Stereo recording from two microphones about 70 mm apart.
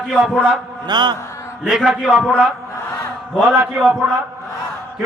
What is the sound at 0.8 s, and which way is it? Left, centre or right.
Speech, right.